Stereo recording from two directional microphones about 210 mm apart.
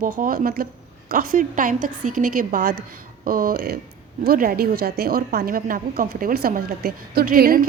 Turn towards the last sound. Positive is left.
turn(degrees=-45)  # may be behind; listen again after turning